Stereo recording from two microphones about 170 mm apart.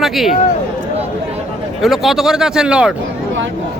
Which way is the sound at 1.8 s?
Centre (ahead or behind).